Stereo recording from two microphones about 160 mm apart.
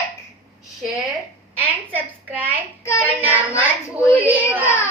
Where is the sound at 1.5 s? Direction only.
10° right (ahead or behind).